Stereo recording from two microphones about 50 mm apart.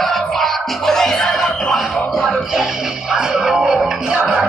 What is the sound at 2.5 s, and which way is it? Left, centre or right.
Music, centre.